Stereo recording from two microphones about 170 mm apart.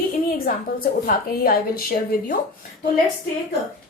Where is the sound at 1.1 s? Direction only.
60° left (ahead or behind).